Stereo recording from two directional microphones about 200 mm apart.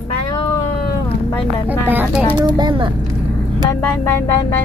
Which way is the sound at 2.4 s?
20° right (ahead or behind).